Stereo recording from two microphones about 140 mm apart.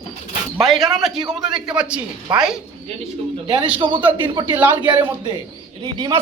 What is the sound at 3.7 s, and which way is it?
Speech, 35° right (ahead or behind).